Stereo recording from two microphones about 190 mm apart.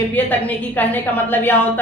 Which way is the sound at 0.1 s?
10° left (ahead or behind).